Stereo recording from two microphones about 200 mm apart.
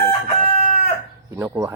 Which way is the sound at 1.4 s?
15° right (ahead or behind).